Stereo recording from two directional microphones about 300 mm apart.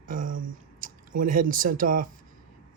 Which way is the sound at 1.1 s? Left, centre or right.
Right.